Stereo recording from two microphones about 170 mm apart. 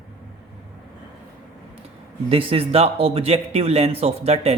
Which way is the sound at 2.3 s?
35° right (ahead or behind).